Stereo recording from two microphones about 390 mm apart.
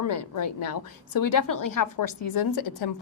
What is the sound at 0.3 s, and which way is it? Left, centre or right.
A woman's voice, left.